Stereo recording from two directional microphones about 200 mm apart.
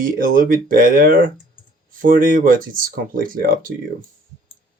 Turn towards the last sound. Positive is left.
turn(degrees=-45)  # may be behind; listen again after turning